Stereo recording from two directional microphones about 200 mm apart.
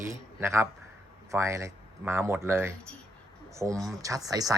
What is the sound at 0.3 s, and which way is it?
A man's voice, 10° right (ahead or behind).